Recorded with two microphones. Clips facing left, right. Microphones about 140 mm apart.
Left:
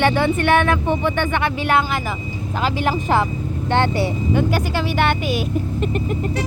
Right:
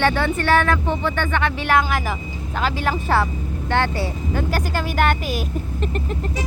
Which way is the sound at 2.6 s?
15° left (ahead or behind).